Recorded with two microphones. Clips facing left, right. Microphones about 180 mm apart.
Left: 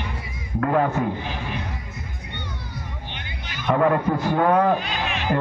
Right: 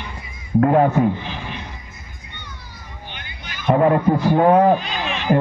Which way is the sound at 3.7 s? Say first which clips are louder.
Right 4 dB; 25° right (ahead or behind).